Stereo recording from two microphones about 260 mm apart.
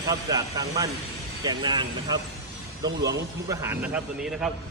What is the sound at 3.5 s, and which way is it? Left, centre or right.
Speech, centre.